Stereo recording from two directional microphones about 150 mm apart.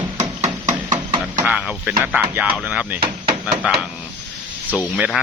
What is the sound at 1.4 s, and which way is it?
Speech, 10° right (ahead or behind).